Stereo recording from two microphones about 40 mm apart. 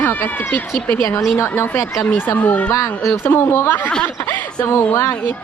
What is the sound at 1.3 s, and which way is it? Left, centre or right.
Speech, left.